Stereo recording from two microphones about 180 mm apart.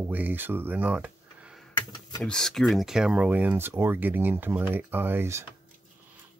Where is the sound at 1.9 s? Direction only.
20° left (ahead or behind).